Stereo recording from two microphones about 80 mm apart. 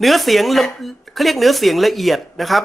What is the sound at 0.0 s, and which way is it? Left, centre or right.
Speech, centre.